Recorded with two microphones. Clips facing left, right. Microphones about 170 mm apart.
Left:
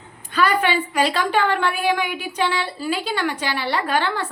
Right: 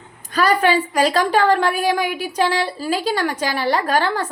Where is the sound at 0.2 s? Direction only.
40° right (ahead or behind).